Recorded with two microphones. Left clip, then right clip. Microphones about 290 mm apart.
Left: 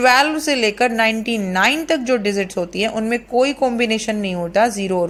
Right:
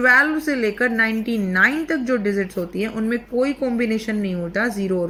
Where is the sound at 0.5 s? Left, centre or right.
Left.